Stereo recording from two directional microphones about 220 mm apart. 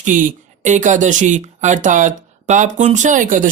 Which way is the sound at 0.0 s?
35° right (ahead or behind).